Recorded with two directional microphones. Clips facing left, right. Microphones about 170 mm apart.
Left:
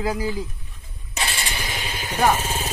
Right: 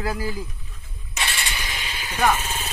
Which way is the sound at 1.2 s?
35° left (ahead or behind).